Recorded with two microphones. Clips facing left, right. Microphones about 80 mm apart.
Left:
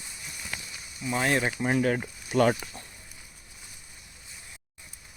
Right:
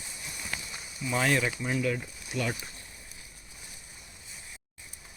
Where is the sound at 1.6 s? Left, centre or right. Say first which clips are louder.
Left 5 dB; left.